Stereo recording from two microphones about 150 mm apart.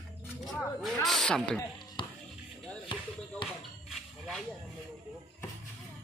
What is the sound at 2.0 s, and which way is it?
Music, 35° left (ahead or behind).